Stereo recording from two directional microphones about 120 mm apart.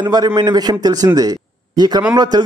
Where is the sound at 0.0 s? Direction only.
35° right (ahead or behind).